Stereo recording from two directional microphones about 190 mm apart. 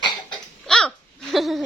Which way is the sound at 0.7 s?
5° left (ahead or behind).